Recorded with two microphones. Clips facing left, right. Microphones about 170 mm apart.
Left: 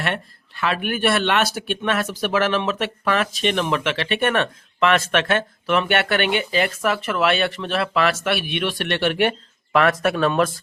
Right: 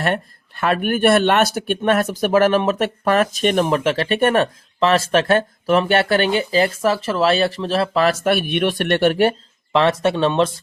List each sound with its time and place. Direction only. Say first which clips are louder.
0.0 s speech: right 5 dB; 45° right (ahead or behind)
9.7 s speech: right 2 dB; 25° right (ahead or behind)